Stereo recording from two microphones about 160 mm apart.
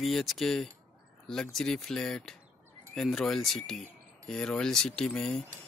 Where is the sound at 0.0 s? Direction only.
Centre (ahead or behind).